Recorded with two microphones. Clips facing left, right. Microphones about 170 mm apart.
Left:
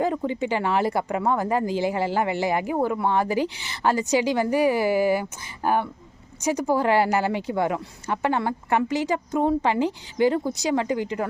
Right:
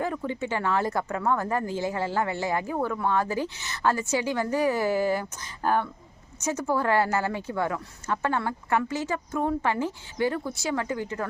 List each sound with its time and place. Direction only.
0.0 s speech: 20° left (ahead or behind)